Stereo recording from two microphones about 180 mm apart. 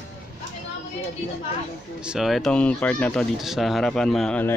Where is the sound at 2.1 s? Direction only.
Centre (ahead or behind).